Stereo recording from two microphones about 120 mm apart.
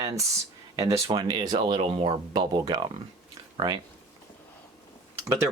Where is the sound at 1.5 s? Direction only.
50° right (ahead or behind).